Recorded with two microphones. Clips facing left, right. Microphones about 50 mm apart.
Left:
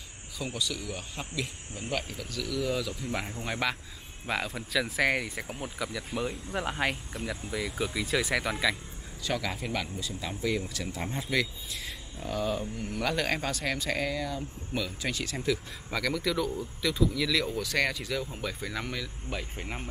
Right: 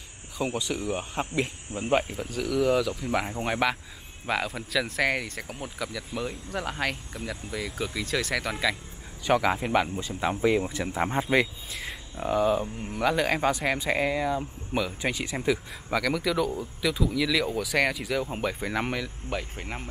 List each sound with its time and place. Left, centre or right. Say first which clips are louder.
0.4 s speech: right 5 dB; right
2.5 s speech: right 7 dB; centre
2.8 s speech: right 6 dB; centre
9.2 s speech: right 8 dB; right
16.0 s speech: right 3 dB; centre
18.8 s speech: right 7 dB; right
19.3 s speech: right 3 dB; centre